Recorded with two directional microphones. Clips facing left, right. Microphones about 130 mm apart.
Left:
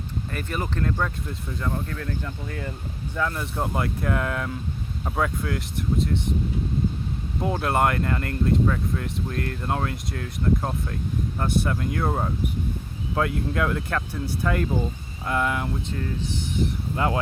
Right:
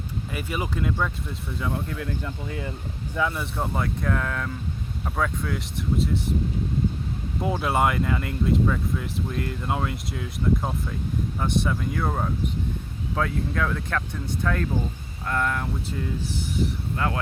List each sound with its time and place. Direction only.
0.3 s speech: 10° right (ahead or behind)
1.9 s speech: 15° right (ahead or behind)
3.2 s speech: 5° right (ahead or behind)
7.4 s speech: centre (ahead or behind)
17.0 s speech: 20° left (ahead or behind)